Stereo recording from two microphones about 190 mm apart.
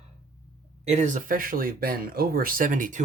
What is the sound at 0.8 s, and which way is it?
Speech, 35° right (ahead or behind).